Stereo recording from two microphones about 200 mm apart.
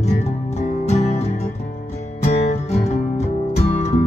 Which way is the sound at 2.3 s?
35° left (ahead or behind).